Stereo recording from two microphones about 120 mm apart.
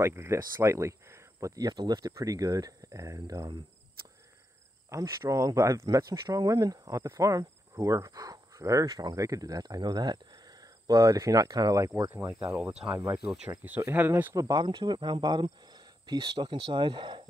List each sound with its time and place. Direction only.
0.0 s speech: 20° right (ahead or behind)
4.8 s speech: 25° right (ahead or behind)
12.5 s speech: 5° right (ahead or behind)
14.3 s speech: 35° right (ahead or behind)